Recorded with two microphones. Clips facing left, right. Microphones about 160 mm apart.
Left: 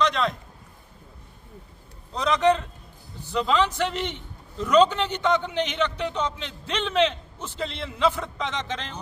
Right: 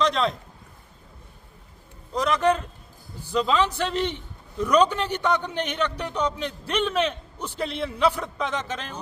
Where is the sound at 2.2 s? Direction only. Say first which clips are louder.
Left 1 dB; 5° right (ahead or behind).